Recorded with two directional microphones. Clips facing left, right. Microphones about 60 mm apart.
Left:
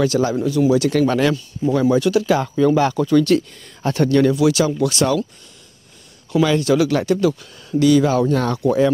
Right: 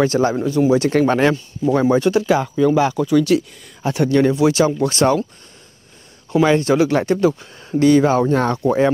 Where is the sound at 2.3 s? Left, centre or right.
Centre; by 5.2 s right.